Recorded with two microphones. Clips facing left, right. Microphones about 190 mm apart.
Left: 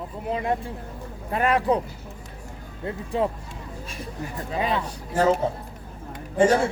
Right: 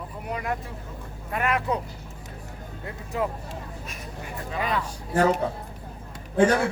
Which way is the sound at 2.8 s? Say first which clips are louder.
Left 4 dB; 30° left (ahead or behind).